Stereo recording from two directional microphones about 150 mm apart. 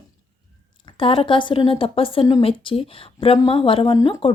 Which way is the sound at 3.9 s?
25° left (ahead or behind).